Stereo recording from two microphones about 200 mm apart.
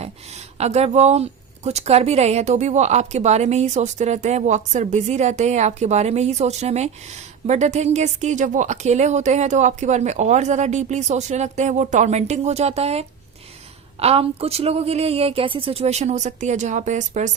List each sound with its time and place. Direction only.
0.0 s speech: 35° right (ahead or behind)